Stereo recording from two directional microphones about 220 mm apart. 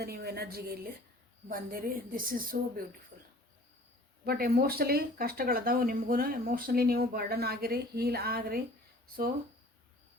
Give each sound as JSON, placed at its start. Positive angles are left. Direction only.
{"t": 0.0, "sound": "a woman's voice", "side_deg": -45}
{"t": 4.3, "sound": "speech", "side_deg": -45}